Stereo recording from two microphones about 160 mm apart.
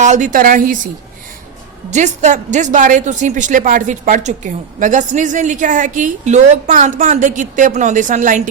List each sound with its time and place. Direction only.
0.0 s a woman's voice: 50° right (ahead or behind)
1.9 s a woman's voice: 50° right (ahead or behind)